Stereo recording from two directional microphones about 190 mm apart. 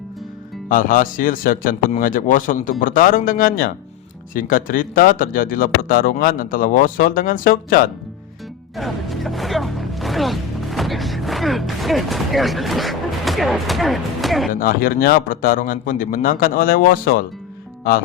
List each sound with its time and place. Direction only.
0.7 s speech: 45° left (ahead or behind)
8.7 s speech: centre (ahead or behind)
14.5 s speech: 50° left (ahead or behind)